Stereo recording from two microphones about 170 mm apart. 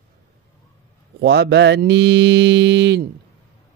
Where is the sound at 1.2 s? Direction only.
75° right (ahead or behind).